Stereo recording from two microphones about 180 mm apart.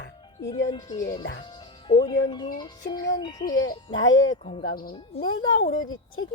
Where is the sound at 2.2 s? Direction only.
25° left (ahead or behind).